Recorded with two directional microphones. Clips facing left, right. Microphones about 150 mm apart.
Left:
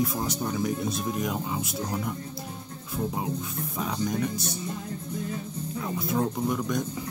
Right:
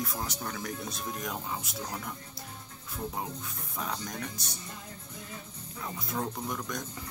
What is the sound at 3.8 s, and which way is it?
Speech, 10° left (ahead or behind).